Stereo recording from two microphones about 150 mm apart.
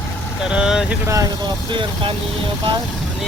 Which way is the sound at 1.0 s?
20° right (ahead or behind).